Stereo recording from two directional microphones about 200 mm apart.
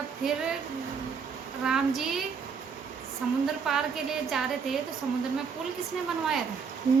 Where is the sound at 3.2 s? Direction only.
5° right (ahead or behind).